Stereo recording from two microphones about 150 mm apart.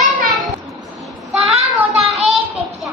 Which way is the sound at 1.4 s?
40° right (ahead or behind).